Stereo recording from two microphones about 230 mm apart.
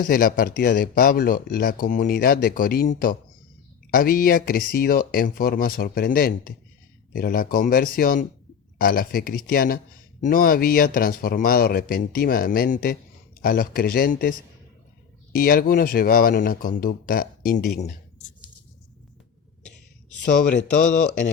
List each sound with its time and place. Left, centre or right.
0.0 s speech: left